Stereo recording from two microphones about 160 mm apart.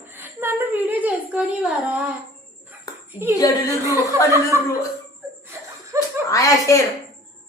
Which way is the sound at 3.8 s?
20° right (ahead or behind).